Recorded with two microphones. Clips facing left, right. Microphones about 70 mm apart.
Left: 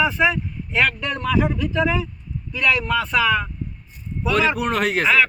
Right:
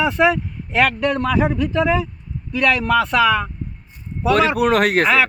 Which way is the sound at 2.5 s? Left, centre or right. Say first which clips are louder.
Right 4 dB; right.